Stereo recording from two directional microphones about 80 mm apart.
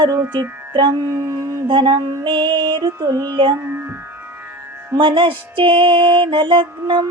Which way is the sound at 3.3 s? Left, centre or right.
Right.